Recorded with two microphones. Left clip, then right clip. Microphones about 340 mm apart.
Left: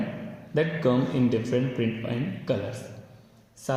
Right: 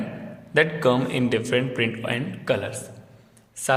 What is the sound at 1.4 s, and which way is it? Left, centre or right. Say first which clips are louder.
A man's voice: right 4 dB; right.